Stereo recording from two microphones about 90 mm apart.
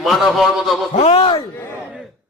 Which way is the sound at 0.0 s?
Centre (ahead or behind).